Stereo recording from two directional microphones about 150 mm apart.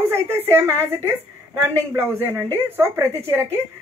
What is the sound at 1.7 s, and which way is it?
Speech, 20° right (ahead or behind).